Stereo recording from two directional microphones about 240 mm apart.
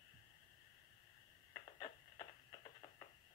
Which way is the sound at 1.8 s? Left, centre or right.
Centre.